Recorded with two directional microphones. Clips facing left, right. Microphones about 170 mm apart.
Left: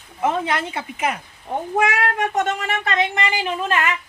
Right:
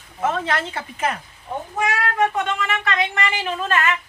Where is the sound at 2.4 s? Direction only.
45° left (ahead or behind).